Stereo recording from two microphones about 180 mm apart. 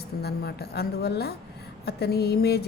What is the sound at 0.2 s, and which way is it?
A woman's voice, 60° left (ahead or behind).